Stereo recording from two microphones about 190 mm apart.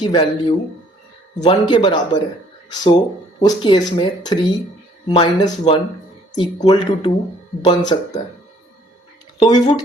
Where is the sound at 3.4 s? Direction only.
25° left (ahead or behind).